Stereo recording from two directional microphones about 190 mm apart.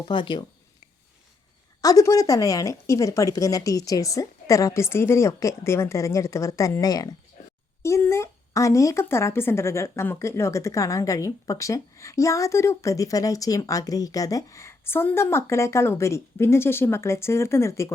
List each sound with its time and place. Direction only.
0.0 s speech: 25° left (ahead or behind)
1.8 s speech: 20° left (ahead or behind)